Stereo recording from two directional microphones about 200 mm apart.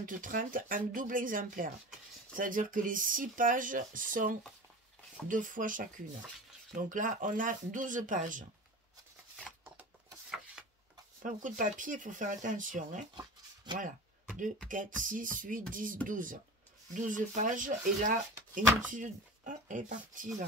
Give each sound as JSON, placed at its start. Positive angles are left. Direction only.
{"t": 0.0, "sound": "speech", "side_deg": -40}
{"t": 11.2, "sound": "speech", "side_deg": -40}
{"t": 13.1, "sound": "a sound", "side_deg": -20}
{"t": 15.0, "sound": "speech", "side_deg": -40}